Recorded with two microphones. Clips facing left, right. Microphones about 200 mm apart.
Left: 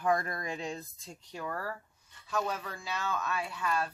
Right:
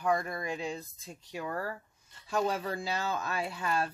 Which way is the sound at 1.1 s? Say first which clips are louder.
Right 2 dB; 15° right (ahead or behind).